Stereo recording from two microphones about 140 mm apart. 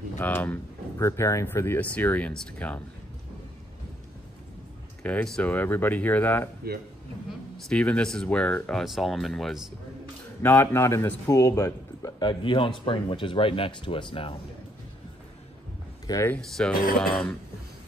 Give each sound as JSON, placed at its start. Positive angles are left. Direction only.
{"t": 0.2, "sound": "speech", "side_deg": 10}
{"t": 0.9, "sound": "speech", "side_deg": 20}
{"t": 5.0, "sound": "speech", "side_deg": 5}
{"t": 7.6, "sound": "speech", "side_deg": 10}
{"t": 10.4, "sound": "a man's voice", "side_deg": 15}
{"t": 16.1, "sound": "speech", "side_deg": 20}
{"t": 16.3, "sound": "speech", "side_deg": 5}